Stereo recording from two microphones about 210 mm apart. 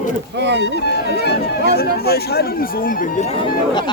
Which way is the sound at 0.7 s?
50° left (ahead or behind).